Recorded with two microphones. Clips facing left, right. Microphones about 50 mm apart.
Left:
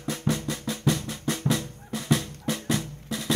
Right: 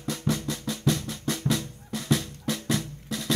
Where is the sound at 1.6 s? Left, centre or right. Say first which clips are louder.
Left 1 dB; left.